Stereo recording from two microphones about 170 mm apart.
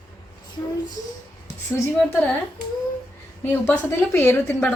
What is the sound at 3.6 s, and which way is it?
Speech, 15° left (ahead or behind).